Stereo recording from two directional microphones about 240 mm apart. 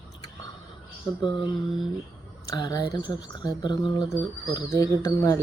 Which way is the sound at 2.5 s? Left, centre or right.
Centre.